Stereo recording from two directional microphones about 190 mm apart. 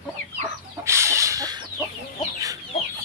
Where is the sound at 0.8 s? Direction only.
15° right (ahead or behind).